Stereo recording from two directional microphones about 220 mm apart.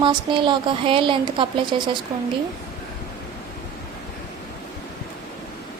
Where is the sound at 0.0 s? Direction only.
20° right (ahead or behind).